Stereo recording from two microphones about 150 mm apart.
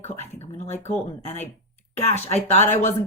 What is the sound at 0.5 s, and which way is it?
Speech, 45° left (ahead or behind).